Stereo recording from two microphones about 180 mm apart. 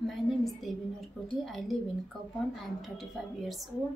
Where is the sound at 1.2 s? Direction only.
Centre (ahead or behind).